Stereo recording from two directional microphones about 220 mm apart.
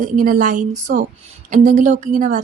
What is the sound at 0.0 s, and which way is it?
Speech, 35° right (ahead or behind).